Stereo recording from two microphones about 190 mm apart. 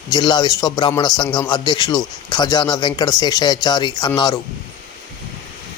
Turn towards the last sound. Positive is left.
turn(degrees=20)  # may be behind; listen again after turning